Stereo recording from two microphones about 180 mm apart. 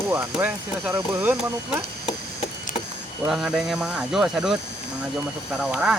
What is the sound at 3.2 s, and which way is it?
Speech, centre (ahead or behind).